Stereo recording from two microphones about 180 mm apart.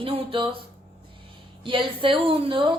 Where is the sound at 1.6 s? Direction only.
30° right (ahead or behind).